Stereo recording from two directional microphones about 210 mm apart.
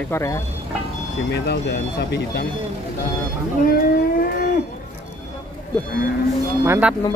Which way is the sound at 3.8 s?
45° left (ahead or behind).